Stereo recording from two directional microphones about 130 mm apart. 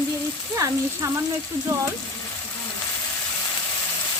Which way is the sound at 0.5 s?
25° right (ahead or behind).